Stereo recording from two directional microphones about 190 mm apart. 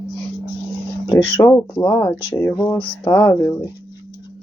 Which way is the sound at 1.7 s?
10° left (ahead or behind).